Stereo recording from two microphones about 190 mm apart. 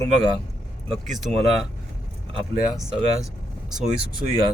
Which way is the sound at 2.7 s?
Centre (ahead or behind).